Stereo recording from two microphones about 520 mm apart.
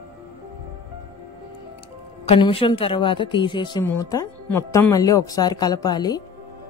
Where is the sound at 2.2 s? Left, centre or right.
Centre.